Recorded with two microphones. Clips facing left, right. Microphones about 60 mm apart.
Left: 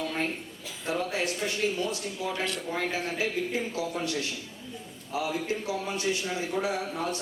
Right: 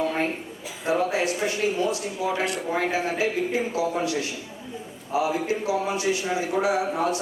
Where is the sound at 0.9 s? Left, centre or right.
Right.